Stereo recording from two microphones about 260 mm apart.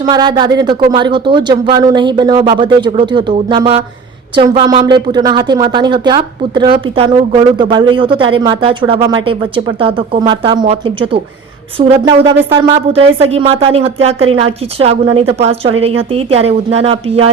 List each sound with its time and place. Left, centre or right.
0.0 s a woman's voice: centre